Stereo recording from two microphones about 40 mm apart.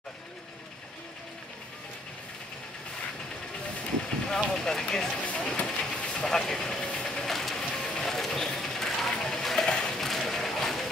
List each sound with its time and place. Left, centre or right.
4.3 s speech: centre
5.2 s train: left
6.2 s vehicle: centre
7.2 s printer: centre
7.7 s a sound: centre
9.7 s a sound: left
9.9 s music: centre